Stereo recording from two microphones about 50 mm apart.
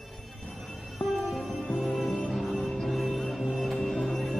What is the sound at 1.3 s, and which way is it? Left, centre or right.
Music, centre.